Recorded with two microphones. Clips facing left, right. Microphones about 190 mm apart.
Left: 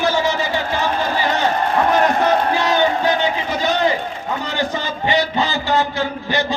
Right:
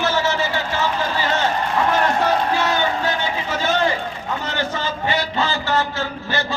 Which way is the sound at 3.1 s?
15° left (ahead or behind).